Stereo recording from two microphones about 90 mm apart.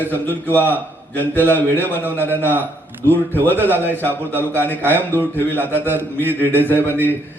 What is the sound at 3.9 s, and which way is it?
Speech, 25° right (ahead or behind).